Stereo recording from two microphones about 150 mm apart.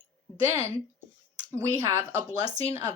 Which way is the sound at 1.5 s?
20° right (ahead or behind).